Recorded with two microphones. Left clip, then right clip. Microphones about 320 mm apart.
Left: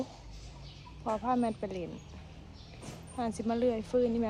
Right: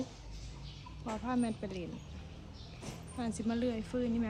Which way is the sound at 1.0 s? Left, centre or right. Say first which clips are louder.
Left 6 dB; left.